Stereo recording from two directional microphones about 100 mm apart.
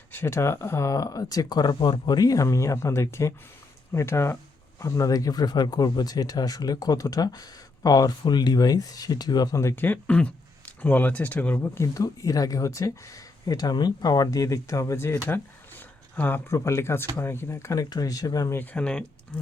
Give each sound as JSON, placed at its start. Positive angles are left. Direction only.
{"t": 0.1, "sound": "speech", "side_deg": 25}
{"t": 9.7, "sound": "speech", "side_deg": 20}
{"t": 17.7, "sound": "speech", "side_deg": 40}
{"t": 18.5, "sound": "speech", "side_deg": 15}